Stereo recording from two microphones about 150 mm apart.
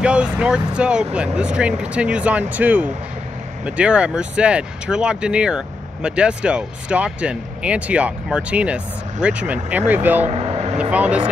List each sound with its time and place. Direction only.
0.0 s speech: 5° right (ahead or behind)
10.2 s vehicle: 40° right (ahead or behind)
10.8 s speech: 10° right (ahead or behind)